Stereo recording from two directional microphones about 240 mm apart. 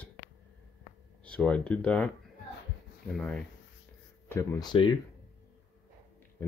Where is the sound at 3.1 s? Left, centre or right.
Centre.